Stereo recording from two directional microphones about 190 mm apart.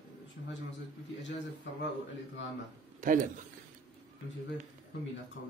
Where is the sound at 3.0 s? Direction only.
40° right (ahead or behind).